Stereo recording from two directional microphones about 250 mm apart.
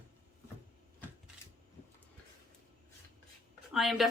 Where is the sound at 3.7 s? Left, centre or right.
Centre.